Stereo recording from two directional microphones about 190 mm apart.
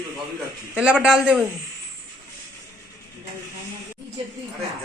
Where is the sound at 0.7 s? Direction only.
5° right (ahead or behind).